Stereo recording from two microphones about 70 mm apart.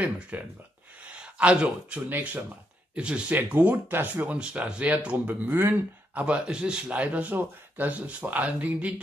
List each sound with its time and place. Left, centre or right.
0.0 s speech: right
1.0 s a sound: centre
2.0 s speech: right